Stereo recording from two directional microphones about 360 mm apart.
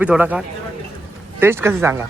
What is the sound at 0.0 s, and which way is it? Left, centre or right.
Speech, centre.